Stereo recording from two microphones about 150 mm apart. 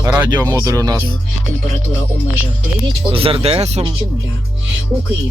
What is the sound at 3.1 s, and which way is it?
Speech, 40° right (ahead or behind).